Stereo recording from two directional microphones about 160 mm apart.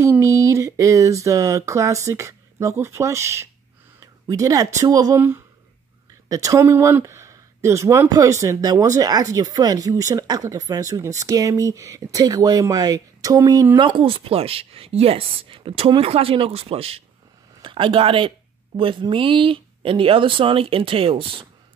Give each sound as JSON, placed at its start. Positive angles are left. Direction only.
{"t": 0.0, "sound": "speech", "side_deg": -20}
{"t": 4.0, "sound": "a sound", "side_deg": -20}
{"t": 4.7, "sound": "speech", "side_deg": -20}